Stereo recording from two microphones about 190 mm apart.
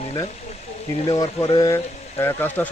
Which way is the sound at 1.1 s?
25° left (ahead or behind).